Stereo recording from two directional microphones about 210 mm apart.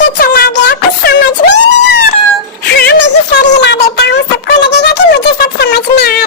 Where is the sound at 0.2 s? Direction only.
50° left (ahead or behind).